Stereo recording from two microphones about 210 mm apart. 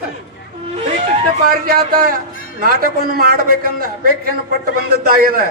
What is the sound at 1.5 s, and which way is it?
A man's voice, 45° right (ahead or behind).